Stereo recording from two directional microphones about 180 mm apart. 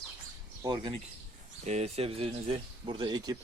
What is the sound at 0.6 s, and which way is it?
Speech, 25° right (ahead or behind).